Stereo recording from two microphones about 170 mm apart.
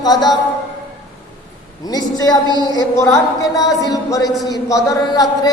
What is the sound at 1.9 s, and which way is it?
A woman's voice, 25° left (ahead or behind).